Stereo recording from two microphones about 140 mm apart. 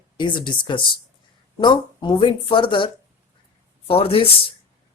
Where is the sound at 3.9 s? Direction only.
40° left (ahead or behind).